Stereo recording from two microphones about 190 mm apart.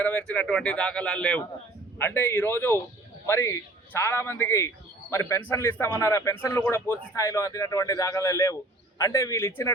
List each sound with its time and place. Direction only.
0.0 s speech: 5° left (ahead or behind)